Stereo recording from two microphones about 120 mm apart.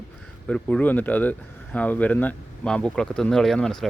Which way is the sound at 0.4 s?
10° left (ahead or behind).